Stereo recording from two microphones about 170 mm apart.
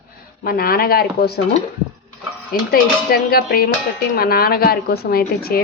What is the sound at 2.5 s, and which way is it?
A woman's voice, 60° left (ahead or behind).